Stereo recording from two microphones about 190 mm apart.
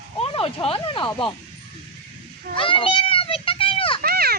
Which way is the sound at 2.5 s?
30° left (ahead or behind).